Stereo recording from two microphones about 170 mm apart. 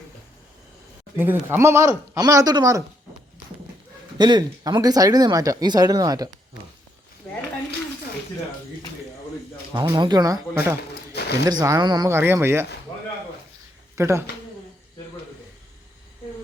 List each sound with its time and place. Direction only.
1.1 s speech: 15° right (ahead or behind)
4.2 s speech: 25° right (ahead or behind)
9.9 s speech: 25° right (ahead or behind)
11.1 s a sound: 70° left (ahead or behind)
11.4 s speech: 20° right (ahead or behind)
12.1 s speech: 15° right (ahead or behind)
13.9 s speech: 15° right (ahead or behind)